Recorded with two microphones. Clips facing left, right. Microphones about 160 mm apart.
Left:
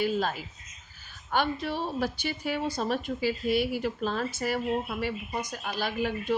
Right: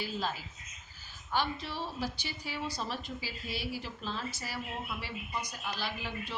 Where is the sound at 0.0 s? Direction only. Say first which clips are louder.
Left 8 dB; 55° left (ahead or behind).